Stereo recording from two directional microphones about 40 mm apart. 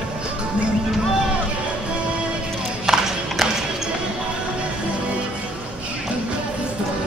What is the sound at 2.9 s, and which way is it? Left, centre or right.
Clip-clop, centre.